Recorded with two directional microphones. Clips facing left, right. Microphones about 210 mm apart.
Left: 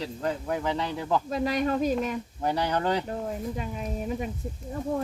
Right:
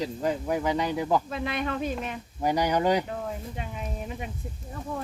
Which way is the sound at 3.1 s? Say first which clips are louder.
Left 3 dB; 40° left (ahead or behind).